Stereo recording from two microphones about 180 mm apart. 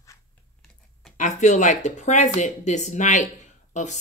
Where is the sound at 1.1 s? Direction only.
45° left (ahead or behind).